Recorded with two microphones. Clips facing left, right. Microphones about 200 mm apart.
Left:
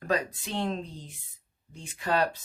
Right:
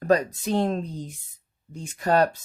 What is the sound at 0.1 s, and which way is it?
Speech, 40° right (ahead or behind).